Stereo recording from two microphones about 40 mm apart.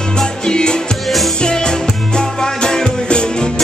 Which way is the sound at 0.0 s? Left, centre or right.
Centre.